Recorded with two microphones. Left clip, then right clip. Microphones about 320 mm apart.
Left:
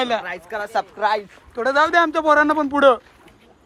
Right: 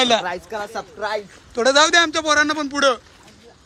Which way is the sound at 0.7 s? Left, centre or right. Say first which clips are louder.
Left 8 dB; left.